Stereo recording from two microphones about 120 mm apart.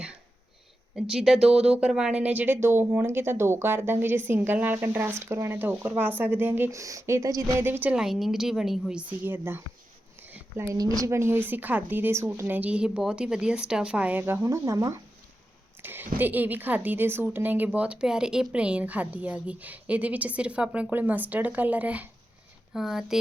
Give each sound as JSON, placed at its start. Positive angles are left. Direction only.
{"t": 0.9, "sound": "speech", "side_deg": -5}
{"t": 7.6, "sound": "speech", "side_deg": -15}
{"t": 10.2, "sound": "a sound", "side_deg": -15}
{"t": 10.8, "sound": "speech", "side_deg": -30}
{"t": 14.4, "sound": "speech", "side_deg": -25}